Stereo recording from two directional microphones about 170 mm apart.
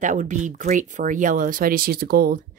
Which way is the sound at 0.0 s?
45° right (ahead or behind).